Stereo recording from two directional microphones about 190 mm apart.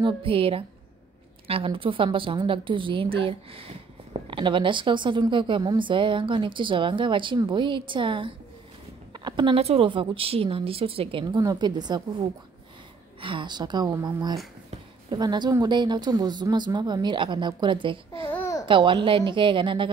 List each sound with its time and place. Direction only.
0.0 s a woman's voice: 30° right (ahead or behind)
18.3 s babbling: 10° left (ahead or behind)
18.7 s a woman's voice: 25° right (ahead or behind)